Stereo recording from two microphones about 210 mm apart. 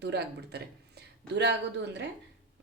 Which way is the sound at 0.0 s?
50° right (ahead or behind).